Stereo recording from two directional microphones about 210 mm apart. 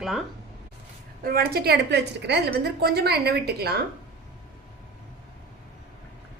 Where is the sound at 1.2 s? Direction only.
45° right (ahead or behind).